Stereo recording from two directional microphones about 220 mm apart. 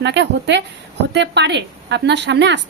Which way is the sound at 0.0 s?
55° right (ahead or behind).